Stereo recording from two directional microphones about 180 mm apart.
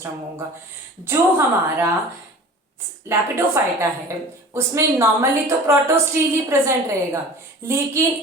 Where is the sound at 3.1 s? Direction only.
15° right (ahead or behind).